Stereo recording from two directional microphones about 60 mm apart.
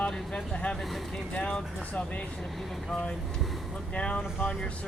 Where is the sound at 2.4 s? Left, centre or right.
Centre.